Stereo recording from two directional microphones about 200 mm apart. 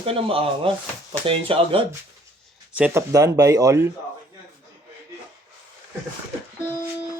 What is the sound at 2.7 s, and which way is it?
Speech, 10° right (ahead or behind).